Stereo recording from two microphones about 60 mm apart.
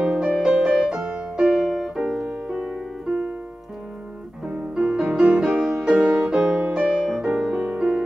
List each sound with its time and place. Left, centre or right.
0.0 s music: centre
4.5 s music: centre
7.6 s music: centre